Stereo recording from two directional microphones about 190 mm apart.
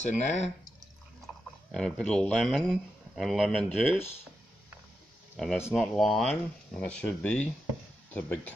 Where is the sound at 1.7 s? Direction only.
5° left (ahead or behind).